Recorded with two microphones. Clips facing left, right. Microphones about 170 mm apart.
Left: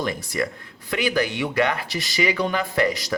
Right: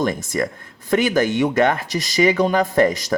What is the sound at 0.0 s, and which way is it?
Speech, 45° right (ahead or behind).